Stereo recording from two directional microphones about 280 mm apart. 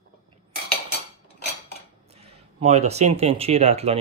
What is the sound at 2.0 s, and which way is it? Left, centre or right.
Speech, right.